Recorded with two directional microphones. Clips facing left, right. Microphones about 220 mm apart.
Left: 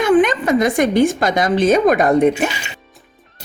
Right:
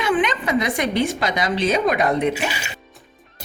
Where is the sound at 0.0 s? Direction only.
45° left (ahead or behind).